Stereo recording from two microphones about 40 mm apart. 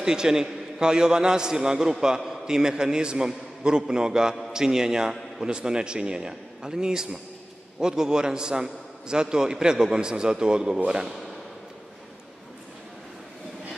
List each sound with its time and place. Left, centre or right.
0.0 s a man's voice: centre